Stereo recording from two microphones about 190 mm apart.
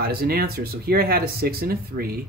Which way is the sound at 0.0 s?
55° right (ahead or behind).